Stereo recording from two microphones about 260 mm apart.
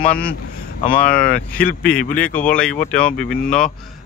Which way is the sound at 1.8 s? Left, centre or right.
Centre.